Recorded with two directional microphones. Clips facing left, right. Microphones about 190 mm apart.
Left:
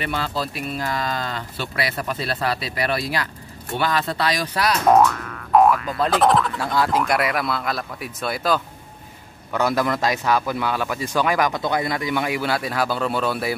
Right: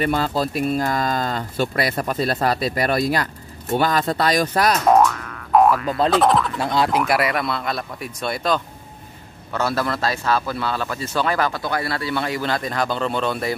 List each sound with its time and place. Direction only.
0.0 s speech: 45° right (ahead or behind)
4.8 s speech: centre (ahead or behind)
6.6 s speech: 20° right (ahead or behind)
7.0 s speech: 5° right (ahead or behind)
9.5 s a man's voice: 15° left (ahead or behind)